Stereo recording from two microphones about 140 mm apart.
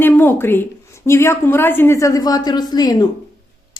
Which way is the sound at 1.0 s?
20° left (ahead or behind).